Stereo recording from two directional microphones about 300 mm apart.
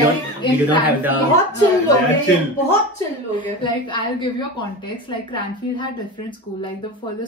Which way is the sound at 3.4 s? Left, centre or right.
Centre.